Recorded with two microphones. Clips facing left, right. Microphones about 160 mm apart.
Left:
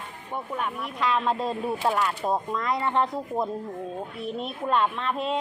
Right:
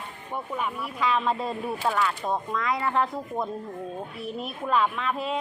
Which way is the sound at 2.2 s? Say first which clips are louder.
Left 1 dB; 5° left (ahead or behind).